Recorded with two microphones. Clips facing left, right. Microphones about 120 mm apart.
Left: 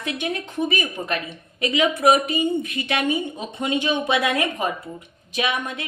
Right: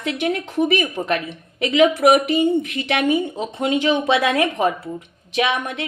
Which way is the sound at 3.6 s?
90° right.